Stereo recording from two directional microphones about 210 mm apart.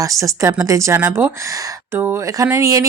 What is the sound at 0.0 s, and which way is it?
Speech, 15° right (ahead or behind).